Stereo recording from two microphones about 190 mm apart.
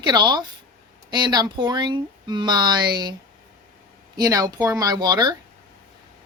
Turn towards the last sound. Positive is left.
turn(degrees=-20)  # may be behind; listen again after turning